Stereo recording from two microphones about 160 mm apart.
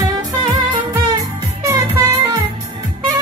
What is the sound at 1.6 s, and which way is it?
Music, 20° right (ahead or behind).